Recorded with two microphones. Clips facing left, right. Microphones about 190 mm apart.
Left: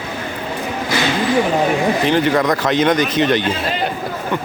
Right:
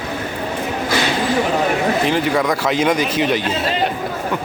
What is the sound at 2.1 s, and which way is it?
Speech, 5° right (ahead or behind).